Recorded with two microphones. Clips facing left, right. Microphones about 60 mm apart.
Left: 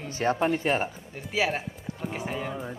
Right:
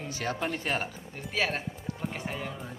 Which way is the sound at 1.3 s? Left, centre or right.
Centre.